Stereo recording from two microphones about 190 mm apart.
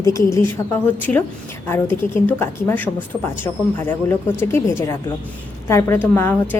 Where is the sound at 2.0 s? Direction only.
10° left (ahead or behind).